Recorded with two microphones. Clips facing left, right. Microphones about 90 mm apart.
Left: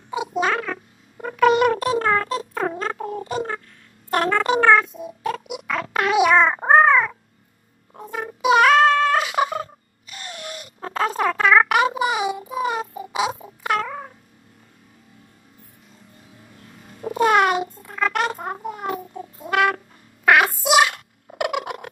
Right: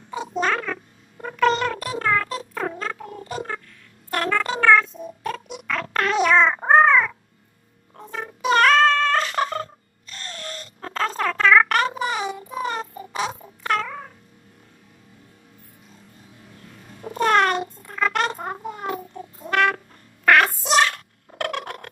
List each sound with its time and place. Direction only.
0.1 s a sound: 10° left (ahead or behind)
1.1 s cat: 5° left (ahead or behind)
1.7 s a sound: 20° left (ahead or behind)
7.9 s cat: 10° left (ahead or behind)
16.6 s cat: 5° left (ahead or behind)
20.2 s fowl: 10° left (ahead or behind)